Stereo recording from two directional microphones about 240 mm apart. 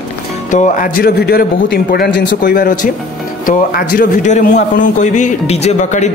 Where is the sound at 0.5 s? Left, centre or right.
Left.